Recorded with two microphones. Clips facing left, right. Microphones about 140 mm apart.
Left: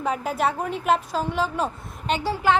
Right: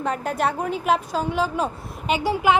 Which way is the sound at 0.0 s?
5° left (ahead or behind).